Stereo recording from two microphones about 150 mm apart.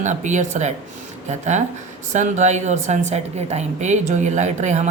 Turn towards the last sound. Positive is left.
turn(degrees=-50)  # may be behind; listen again after turning